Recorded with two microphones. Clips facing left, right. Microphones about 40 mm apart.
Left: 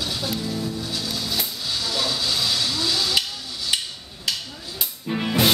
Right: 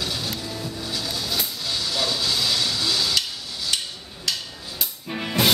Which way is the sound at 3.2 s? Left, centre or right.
Centre.